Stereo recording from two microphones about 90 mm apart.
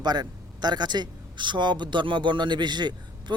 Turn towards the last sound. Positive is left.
turn(degrees=-55)  # may be behind; listen again after turning